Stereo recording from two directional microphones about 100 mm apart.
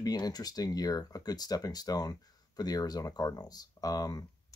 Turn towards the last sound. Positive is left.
turn(degrees=40)  # may be behind; listen again after turning